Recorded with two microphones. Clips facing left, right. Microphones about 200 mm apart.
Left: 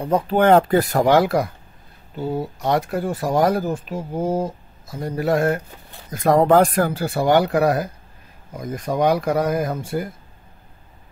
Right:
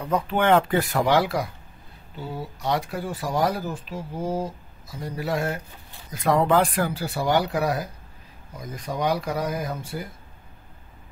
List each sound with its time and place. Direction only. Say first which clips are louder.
0.0 s speech: left 6 dB; 35° left (ahead or behind); by 10.0 s 55° left (ahead or behind)